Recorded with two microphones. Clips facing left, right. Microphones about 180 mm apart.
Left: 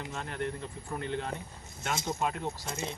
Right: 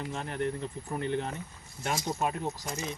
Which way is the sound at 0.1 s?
20° right (ahead or behind).